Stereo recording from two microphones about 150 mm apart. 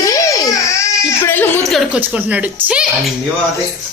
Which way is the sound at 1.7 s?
10° right (ahead or behind).